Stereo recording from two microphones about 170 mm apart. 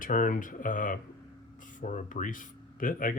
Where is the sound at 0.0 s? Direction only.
55° left (ahead or behind).